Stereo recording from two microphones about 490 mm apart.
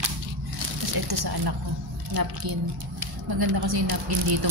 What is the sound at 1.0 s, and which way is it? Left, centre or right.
A woman's voice, right.